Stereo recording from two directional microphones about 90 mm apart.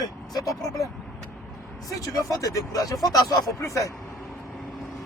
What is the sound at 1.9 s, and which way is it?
Speech, 45° left (ahead or behind).